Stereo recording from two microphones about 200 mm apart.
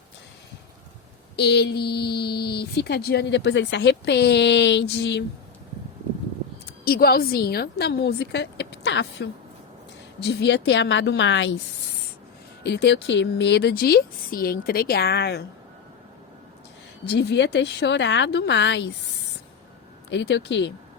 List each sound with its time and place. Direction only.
1.4 s speech: 55° left (ahead or behind)
6.7 s a woman's voice: 50° left (ahead or behind); by 11.6 s 65° left (ahead or behind)
12.6 s speech: 60° left (ahead or behind)
17.1 s speech: 55° left (ahead or behind)
20.1 s speech: 60° left (ahead or behind)